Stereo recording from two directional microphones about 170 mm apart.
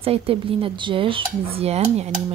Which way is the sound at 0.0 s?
35° right (ahead or behind).